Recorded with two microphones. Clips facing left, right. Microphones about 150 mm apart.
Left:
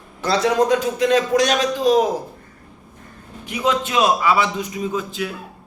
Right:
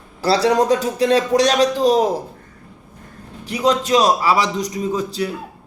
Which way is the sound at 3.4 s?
35° right (ahead or behind).